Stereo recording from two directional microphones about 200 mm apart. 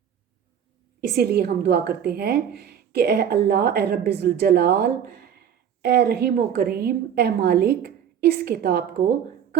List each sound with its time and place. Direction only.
1.1 s speech: 50° right (ahead or behind)